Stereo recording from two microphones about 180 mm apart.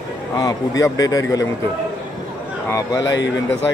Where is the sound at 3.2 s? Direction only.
85° left.